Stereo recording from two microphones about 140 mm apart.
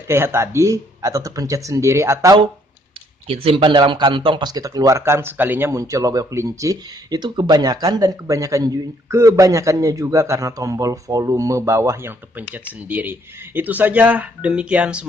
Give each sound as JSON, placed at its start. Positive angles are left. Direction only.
{"t": 0.1, "sound": "speech", "side_deg": -20}
{"t": 3.3, "sound": "speech", "side_deg": -40}